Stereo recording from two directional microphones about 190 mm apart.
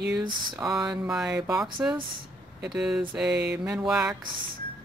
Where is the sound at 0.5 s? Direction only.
5° right (ahead or behind).